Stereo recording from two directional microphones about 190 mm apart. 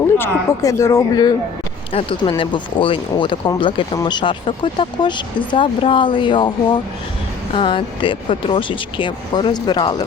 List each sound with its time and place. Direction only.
0.2 s speech: 15° left (ahead or behind)